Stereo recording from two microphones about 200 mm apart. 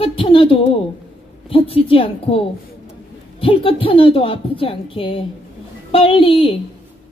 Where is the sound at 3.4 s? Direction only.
25° left (ahead or behind).